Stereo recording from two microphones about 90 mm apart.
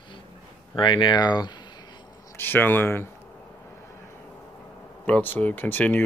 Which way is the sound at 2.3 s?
25° left (ahead or behind).